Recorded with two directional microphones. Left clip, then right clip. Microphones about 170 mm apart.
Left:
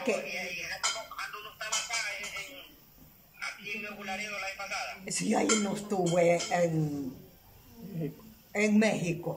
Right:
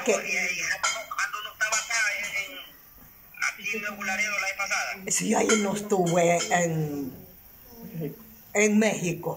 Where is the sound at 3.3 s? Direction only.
10° left (ahead or behind).